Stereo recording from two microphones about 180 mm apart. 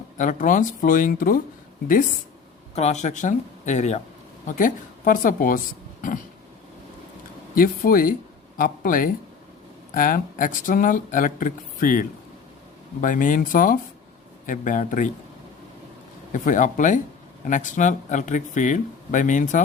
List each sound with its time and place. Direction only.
0.2 s speech: 45° left (ahead or behind)
2.7 s speech: 40° left (ahead or behind)
7.5 s speech: 50° left (ahead or behind)
16.3 s speech: 45° left (ahead or behind)